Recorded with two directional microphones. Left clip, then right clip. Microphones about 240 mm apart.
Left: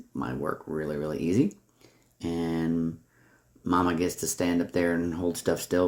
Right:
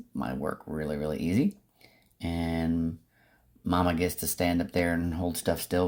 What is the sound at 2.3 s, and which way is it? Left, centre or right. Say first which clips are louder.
Speech: left 2 dB; right.